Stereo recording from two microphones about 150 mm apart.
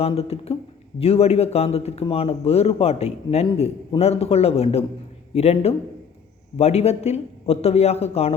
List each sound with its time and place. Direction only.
0.0 s speech: 40° left (ahead or behind)